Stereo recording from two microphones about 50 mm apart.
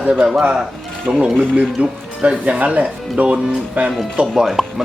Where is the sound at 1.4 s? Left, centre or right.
Right.